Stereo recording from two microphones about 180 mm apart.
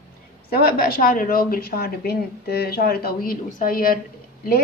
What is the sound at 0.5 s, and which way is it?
A woman's voice, 60° left (ahead or behind).